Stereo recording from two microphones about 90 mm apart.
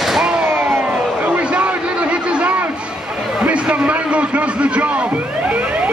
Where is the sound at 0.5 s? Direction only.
25° right (ahead or behind).